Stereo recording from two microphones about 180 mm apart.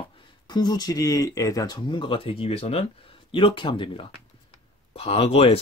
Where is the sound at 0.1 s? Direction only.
25° left (ahead or behind).